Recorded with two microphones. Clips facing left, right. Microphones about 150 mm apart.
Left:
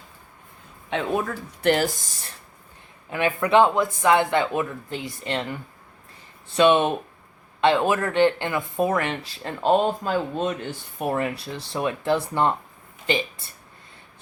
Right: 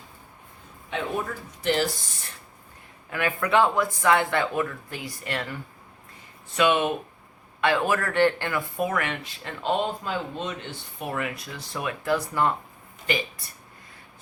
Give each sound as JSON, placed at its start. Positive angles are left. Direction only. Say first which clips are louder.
{"t": 0.9, "sound": "speech", "louder": "left 4 dB", "side_deg": 85}
{"t": 3.1, "sound": "speech", "louder": "left 4 dB", "side_deg": 20}